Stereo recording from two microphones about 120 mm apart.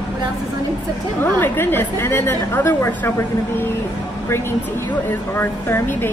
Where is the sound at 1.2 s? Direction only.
15° left (ahead or behind).